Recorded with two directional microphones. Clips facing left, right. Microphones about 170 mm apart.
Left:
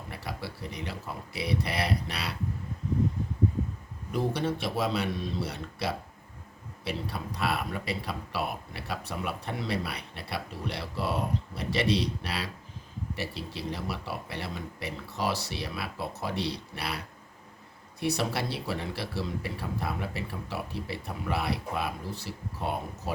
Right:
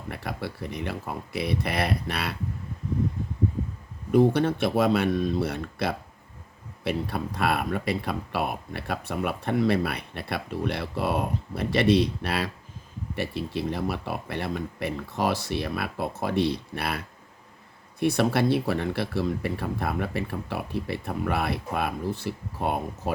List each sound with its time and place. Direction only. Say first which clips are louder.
0.1 s speech: right 6 dB; 55° right (ahead or behind)
4.1 s speech: right 9 dB; 55° right (ahead or behind)
18.0 s speech: right 7 dB; 55° right (ahead or behind)